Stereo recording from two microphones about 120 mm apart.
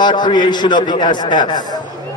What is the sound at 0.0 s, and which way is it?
A man's voice, 40° left (ahead or behind).